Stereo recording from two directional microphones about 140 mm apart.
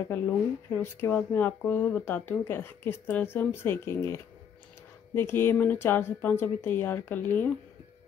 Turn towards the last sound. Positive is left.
turn(degrees=15)  # may be behind; listen again after turning